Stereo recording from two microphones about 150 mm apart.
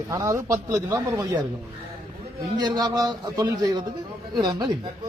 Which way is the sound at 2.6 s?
30° right (ahead or behind).